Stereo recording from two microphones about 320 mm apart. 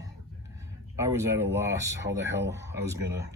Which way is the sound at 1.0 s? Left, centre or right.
Centre.